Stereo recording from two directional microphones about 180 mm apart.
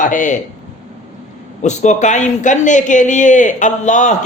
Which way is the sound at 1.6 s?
40° left (ahead or behind).